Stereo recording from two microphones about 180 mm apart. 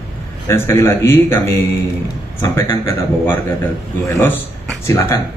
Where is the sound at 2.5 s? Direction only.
15° left (ahead or behind).